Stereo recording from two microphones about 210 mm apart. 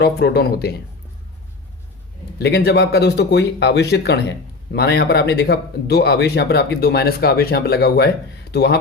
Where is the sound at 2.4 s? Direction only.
50° left (ahead or behind).